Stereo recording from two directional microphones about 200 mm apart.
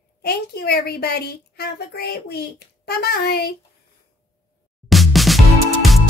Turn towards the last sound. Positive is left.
turn(degrees=0)  # may be behind; listen again after turning